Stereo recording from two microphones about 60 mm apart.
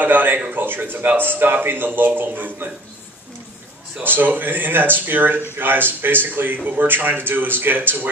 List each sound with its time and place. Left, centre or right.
0.0 s a sound: right
0.6 s speech: right
4.0 s speech: right